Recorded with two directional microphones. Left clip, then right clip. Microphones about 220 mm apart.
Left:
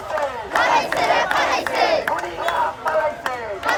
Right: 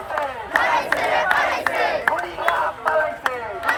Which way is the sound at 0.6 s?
20° left (ahead or behind).